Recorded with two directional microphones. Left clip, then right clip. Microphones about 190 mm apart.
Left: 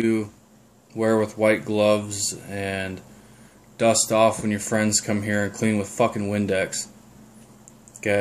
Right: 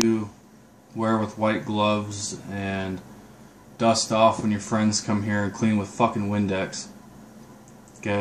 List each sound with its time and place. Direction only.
0.9 s speech: 25° left (ahead or behind)